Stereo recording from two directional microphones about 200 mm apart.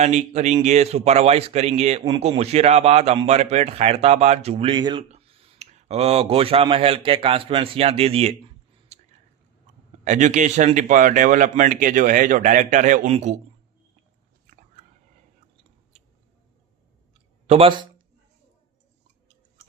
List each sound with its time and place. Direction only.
0.0 s speech: 35° right (ahead or behind)
8.9 s a sound: 35° right (ahead or behind)
10.0 s speech: 35° right (ahead or behind)
14.4 s biting: 40° right (ahead or behind)
17.4 s speech: 30° right (ahead or behind)